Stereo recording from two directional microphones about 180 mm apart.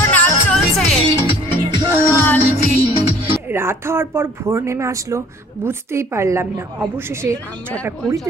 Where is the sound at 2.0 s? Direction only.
15° left (ahead or behind).